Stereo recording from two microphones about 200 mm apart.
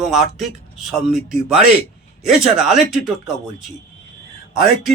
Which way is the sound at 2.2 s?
Centre (ahead or behind).